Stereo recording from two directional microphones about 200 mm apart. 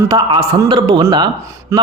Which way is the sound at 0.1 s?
20° right (ahead or behind).